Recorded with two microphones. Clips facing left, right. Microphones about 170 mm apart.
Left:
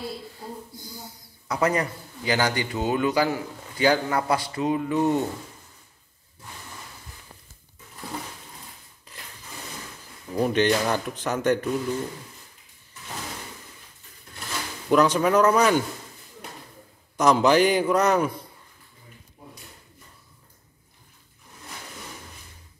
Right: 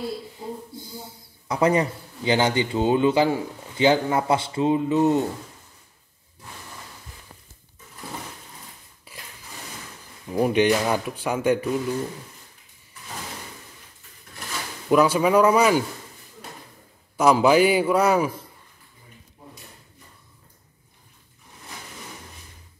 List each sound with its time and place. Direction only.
0.4 s speech: 25° right (ahead or behind)
9.1 s a sound: 5° right (ahead or behind)
10.2 s speech: 15° right (ahead or behind)
14.9 s speech: 5° right (ahead or behind)
17.2 s speech: 5° right (ahead or behind)